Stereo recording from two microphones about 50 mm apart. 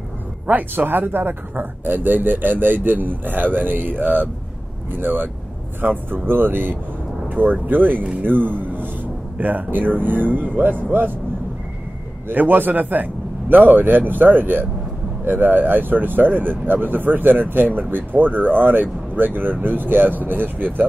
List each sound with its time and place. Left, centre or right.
0.5 s a man's voice: right
12.3 s speech: right